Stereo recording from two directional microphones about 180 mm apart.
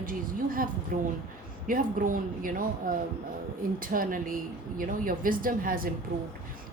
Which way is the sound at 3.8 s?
50° right (ahead or behind).